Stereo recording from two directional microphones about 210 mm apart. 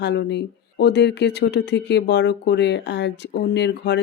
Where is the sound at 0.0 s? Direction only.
55° left (ahead or behind).